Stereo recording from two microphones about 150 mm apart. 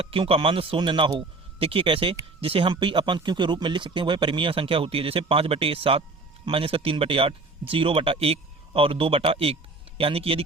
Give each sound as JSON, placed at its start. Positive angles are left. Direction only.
{"t": 0.0, "sound": "speech", "side_deg": -35}